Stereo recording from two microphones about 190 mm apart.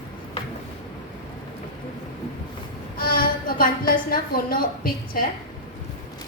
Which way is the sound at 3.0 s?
50° left (ahead or behind).